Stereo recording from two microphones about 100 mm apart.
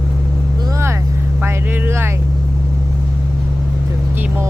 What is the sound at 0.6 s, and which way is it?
Vehicle, 40° right (ahead or behind).